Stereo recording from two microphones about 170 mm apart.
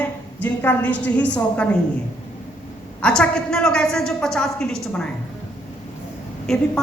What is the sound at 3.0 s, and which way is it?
A woman's voice, 5° left (ahead or behind).